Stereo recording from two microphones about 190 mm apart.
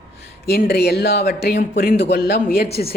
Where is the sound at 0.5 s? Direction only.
55° left (ahead or behind).